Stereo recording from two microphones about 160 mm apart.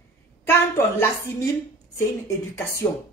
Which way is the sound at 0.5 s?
15° left (ahead or behind).